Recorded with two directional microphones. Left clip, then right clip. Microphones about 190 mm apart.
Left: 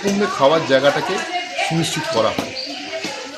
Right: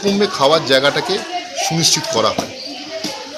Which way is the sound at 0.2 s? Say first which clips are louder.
Right 1 dB; 15° right (ahead or behind).